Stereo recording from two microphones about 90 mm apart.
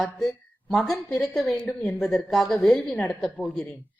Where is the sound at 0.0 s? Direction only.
Centre (ahead or behind).